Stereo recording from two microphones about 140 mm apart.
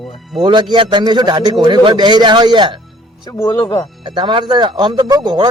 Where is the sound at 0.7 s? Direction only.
35° right (ahead or behind).